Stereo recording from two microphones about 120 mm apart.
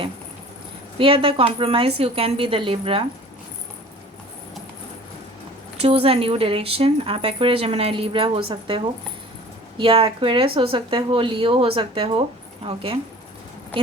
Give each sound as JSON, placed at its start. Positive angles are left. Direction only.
{"t": 0.9, "sound": "speech", "side_deg": -50}
{"t": 5.7, "sound": "speech", "side_deg": -55}